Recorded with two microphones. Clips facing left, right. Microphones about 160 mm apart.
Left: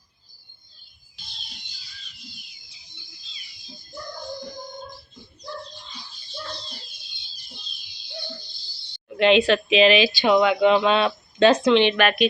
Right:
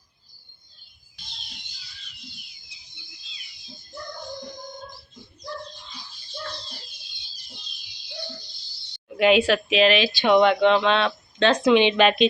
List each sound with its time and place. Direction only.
9.0 s speech: 5° right (ahead or behind); by 11.6 s 10° left (ahead or behind)
11.6 s speech: 15° right (ahead or behind)